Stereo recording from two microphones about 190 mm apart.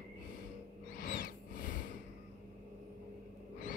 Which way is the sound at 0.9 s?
50° left (ahead or behind).